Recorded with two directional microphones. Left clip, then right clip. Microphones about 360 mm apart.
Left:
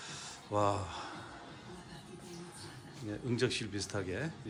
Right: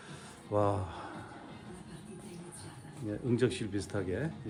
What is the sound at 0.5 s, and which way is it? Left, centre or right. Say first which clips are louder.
Speech: right 1 dB; centre.